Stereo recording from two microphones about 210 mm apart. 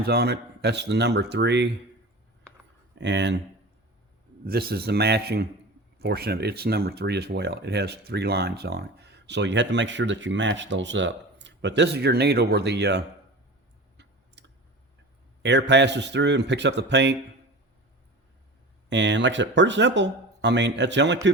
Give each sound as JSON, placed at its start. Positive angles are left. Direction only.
{"t": 0.0, "sound": "speech", "side_deg": -50}
{"t": 3.0, "sound": "speech", "side_deg": -60}
{"t": 4.4, "sound": "speech", "side_deg": -50}
{"t": 13.9, "sound": "clicking", "side_deg": -55}
{"t": 15.4, "sound": "speech", "side_deg": -55}
{"t": 18.9, "sound": "speech", "side_deg": -60}